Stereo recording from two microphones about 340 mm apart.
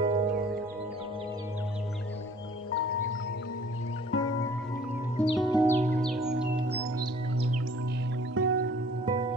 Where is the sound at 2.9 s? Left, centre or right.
Left.